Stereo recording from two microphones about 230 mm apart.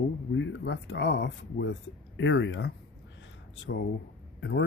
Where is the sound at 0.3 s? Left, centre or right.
Left.